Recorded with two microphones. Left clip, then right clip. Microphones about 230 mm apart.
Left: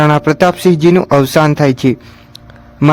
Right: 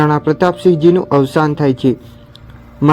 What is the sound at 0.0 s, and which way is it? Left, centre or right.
A man's voice, left.